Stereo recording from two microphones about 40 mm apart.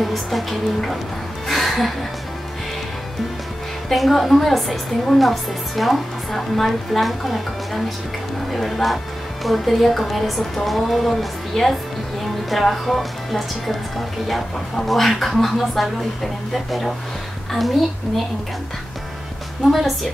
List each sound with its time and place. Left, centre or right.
0.0 s speech: centre
1.5 s music: centre
3.9 s speech: centre